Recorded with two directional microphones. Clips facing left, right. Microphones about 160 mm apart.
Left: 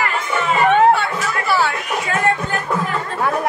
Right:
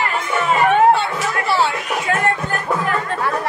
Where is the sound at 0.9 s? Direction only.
25° right (ahead or behind).